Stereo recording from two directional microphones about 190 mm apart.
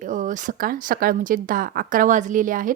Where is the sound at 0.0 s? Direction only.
40° right (ahead or behind).